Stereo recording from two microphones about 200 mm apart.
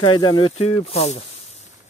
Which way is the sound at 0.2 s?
25° left (ahead or behind).